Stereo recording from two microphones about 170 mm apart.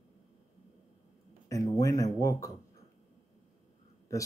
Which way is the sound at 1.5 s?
20° left (ahead or behind).